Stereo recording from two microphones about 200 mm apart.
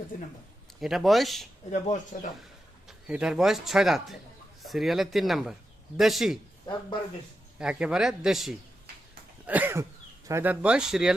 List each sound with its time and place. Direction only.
0.8 s a man's voice: centre (ahead or behind)
1.7 s speech: 35° left (ahead or behind)
2.8 s a man's voice: 5° right (ahead or behind)
7.6 s a man's voice: 5° right (ahead or behind)
9.5 s cough: 10° right (ahead or behind)
10.2 s a man's voice: 10° right (ahead or behind)